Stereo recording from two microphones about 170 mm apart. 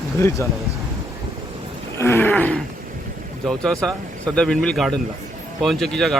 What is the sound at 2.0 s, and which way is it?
Wild animals, 15° left (ahead or behind).